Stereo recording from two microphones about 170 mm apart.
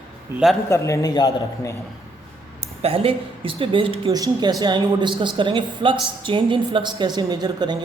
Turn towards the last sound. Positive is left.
turn(degrees=-25)  # may be behind; listen again after turning